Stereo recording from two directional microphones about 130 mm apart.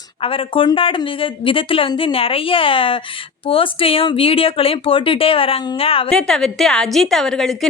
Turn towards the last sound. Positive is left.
turn(degrees=5)  # may be behind; listen again after turning